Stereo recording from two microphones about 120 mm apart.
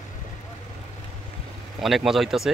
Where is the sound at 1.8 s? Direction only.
Centre (ahead or behind).